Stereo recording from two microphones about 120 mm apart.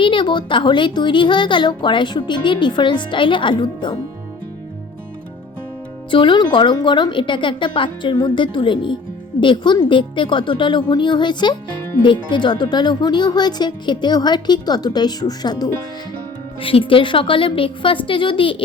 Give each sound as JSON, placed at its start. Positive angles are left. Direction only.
{"t": 0.0, "sound": "speech", "side_deg": 40}
{"t": 6.1, "sound": "a woman's voice", "side_deg": 40}
{"t": 16.6, "sound": "a woman's voice", "side_deg": 50}